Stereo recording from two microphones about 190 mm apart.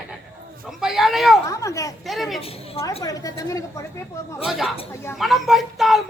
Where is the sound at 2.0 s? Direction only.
Centre (ahead or behind).